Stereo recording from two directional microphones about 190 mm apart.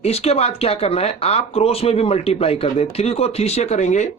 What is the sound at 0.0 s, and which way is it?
Speech, 35° left (ahead or behind).